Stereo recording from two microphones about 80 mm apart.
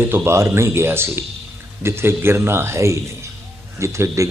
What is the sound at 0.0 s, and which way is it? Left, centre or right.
A man's voice, right.